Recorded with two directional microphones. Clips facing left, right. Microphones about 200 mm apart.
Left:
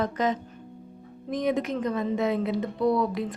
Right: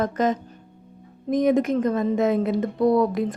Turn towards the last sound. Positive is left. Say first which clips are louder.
# right 5 dB
turn(degrees=-45)  # may be behind; listen again after turning